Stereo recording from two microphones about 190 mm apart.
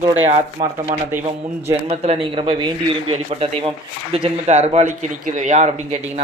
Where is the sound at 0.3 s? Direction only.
35° right (ahead or behind).